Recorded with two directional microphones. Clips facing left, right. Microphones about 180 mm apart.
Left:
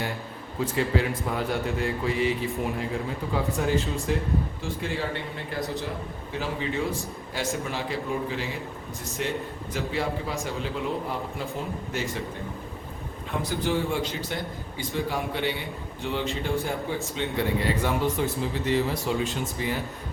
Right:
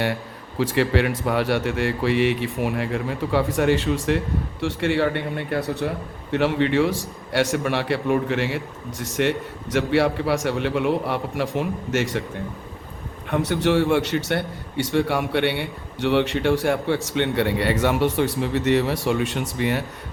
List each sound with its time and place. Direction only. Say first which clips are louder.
0.6 s a man's voice: right 5 dB; 75° right (ahead or behind)
13.3 s a man's voice: right 7 dB; 70° right (ahead or behind)